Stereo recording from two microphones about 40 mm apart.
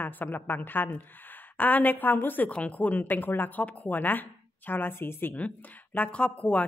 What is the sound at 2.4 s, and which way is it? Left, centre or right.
A woman's voice, left.